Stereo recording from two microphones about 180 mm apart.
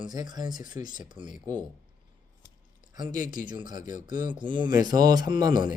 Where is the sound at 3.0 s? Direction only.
45° left (ahead or behind).